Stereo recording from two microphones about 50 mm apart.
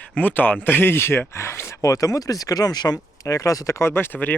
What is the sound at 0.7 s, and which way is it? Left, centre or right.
Speech, left.